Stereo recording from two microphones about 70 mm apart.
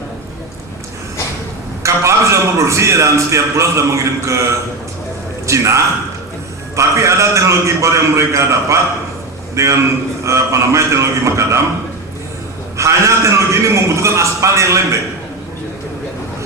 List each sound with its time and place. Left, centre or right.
1.8 s a man's voice: right
5.5 s a man's voice: right
12.7 s a man's voice: right